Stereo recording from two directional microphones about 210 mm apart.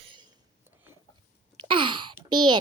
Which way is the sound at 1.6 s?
25° right (ahead or behind).